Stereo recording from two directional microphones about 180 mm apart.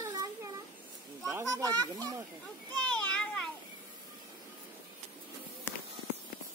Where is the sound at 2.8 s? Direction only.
5° left (ahead or behind).